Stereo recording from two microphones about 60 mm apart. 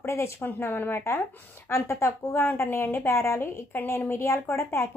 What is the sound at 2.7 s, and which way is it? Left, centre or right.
Speech, left.